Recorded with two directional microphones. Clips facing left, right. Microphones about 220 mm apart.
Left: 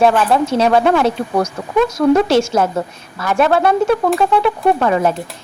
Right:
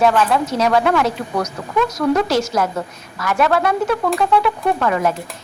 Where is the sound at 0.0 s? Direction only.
30° left (ahead or behind).